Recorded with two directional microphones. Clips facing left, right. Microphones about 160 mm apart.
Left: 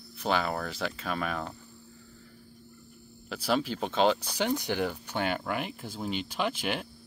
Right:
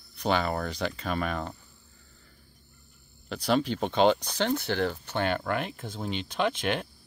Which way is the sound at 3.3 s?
5° left (ahead or behind).